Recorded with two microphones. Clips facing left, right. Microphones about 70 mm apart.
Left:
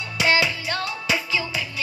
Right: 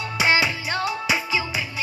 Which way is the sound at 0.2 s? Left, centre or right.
Right.